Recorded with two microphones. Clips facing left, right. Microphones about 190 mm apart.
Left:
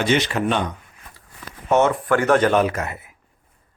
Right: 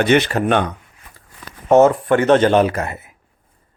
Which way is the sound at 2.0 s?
25° right (ahead or behind).